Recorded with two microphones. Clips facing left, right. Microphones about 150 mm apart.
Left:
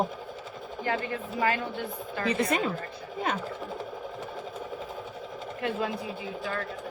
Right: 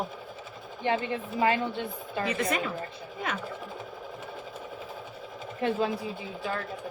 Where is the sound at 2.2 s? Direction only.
30° left (ahead or behind).